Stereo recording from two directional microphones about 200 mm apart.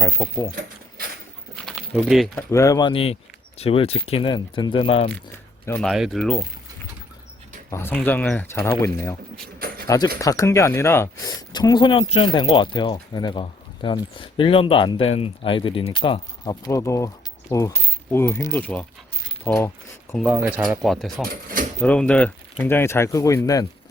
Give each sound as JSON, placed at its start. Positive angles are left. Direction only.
{"t": 0.0, "sound": "speech", "side_deg": 15}
{"t": 1.5, "sound": "crumpling", "side_deg": 0}
{"t": 2.5, "sound": "speech", "side_deg": 15}
{"t": 5.6, "sound": "speech", "side_deg": 10}
{"t": 5.9, "sound": "speech", "side_deg": 0}
{"t": 7.7, "sound": "speech", "side_deg": 10}
{"t": 8.8, "sound": "a sound", "side_deg": 10}
{"t": 9.6, "sound": "a sound", "side_deg": -50}
{"t": 9.8, "sound": "speech", "side_deg": 20}
{"t": 20.2, "sound": "speech", "side_deg": -10}